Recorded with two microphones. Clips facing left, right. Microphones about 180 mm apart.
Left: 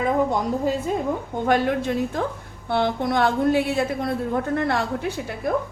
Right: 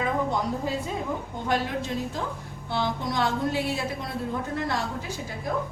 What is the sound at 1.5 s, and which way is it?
A woman's voice, 55° left (ahead or behind).